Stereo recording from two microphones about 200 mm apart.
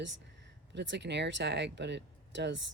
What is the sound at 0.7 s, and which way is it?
Speech, 60° right (ahead or behind).